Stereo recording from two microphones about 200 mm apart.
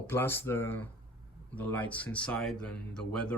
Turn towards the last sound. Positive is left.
turn(degrees=5)  # may be behind; listen again after turning